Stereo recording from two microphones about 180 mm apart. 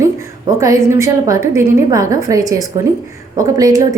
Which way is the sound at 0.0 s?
15° right (ahead or behind).